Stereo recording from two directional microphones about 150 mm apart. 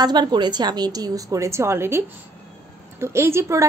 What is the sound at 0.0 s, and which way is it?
A woman's voice, 30° right (ahead or behind).